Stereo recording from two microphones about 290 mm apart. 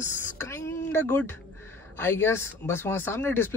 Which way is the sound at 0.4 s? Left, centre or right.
Centre.